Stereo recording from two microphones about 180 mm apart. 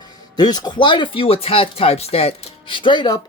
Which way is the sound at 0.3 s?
20° left (ahead or behind).